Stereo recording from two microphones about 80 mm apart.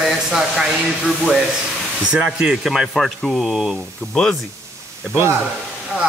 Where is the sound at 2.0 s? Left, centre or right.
Centre.